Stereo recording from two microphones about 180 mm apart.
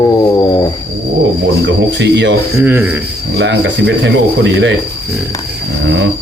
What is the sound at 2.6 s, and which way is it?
Speech, 10° right (ahead or behind).